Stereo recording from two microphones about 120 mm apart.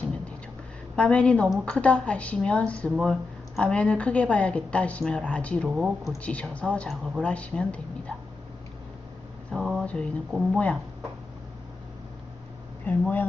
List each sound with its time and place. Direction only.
0.9 s speech: 10° left (ahead or behind)
5.6 s speech: 5° right (ahead or behind)
6.2 s speech: 10° left (ahead or behind)
9.6 s a sound: 5° right (ahead or behind)
9.8 s speech: 10° left (ahead or behind)
12.8 s speech: 15° left (ahead or behind)